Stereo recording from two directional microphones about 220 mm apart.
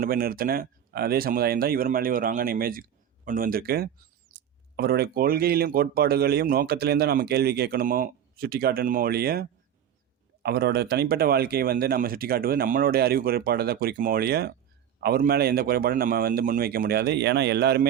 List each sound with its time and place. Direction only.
0.0 s speech: 40° right (ahead or behind)